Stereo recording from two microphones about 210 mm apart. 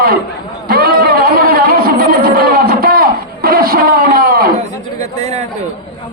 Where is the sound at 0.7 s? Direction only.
45° right (ahead or behind).